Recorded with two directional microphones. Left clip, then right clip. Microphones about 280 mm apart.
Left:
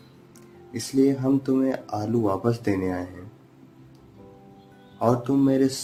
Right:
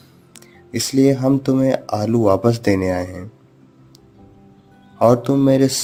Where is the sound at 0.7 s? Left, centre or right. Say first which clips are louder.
Right 6 dB; right.